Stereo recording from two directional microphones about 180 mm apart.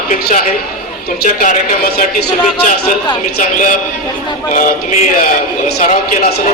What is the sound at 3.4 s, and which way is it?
A man's voice, 45° left (ahead or behind).